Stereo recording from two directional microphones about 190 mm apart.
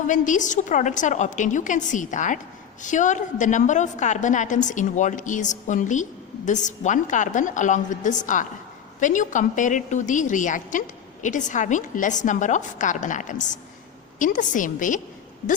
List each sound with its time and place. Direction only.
0.1 s a woman's voice: 40° left (ahead or behind)